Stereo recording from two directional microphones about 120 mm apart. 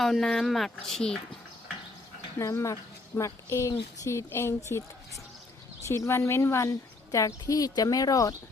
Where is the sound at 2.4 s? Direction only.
25° left (ahead or behind).